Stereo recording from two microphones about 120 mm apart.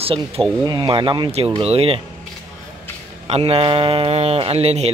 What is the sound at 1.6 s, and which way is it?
Speech, 50° right (ahead or behind).